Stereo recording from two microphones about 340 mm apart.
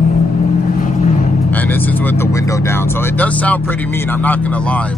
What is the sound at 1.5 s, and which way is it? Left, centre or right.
Speech, centre.